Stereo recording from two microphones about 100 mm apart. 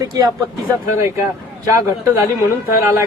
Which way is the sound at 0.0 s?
40° right (ahead or behind).